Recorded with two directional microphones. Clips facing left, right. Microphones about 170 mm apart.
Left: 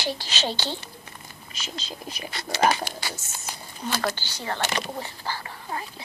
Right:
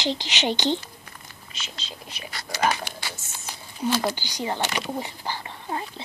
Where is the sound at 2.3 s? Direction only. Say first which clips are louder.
Left 2 dB; 25° left (ahead or behind).